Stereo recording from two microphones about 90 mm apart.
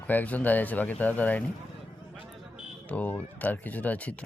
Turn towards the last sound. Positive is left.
turn(degrees=15)  # may be behind; listen again after turning